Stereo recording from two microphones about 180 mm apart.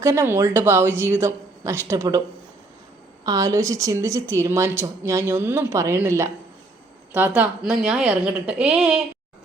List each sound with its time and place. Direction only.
0.0 s a woman's voice: 15° right (ahead or behind)
3.2 s a woman's voice: 20° right (ahead or behind)